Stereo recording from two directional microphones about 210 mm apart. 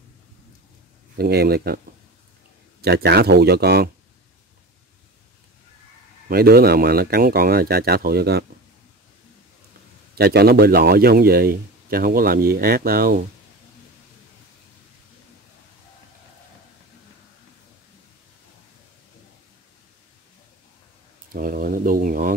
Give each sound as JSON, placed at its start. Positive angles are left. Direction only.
{"t": 1.1, "sound": "a man's voice", "side_deg": -50}
{"t": 2.8, "sound": "a man's voice", "side_deg": -50}
{"t": 6.2, "sound": "a man's voice", "side_deg": -45}
{"t": 10.1, "sound": "a man's voice", "side_deg": -50}
{"t": 21.3, "sound": "speech", "side_deg": -40}